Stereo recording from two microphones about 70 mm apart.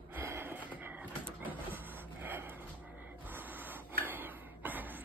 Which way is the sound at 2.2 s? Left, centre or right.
Right.